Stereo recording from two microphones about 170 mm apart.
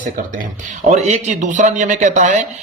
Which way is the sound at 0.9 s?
40° right (ahead or behind).